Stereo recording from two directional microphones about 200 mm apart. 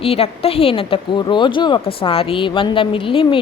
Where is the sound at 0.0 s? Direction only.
30° left (ahead or behind).